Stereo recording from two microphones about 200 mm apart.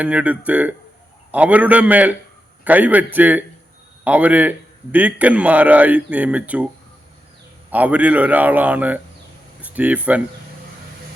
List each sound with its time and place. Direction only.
0.0 s a man's voice: 5° right (ahead or behind)
7.7 s a man's voice: 10° right (ahead or behind)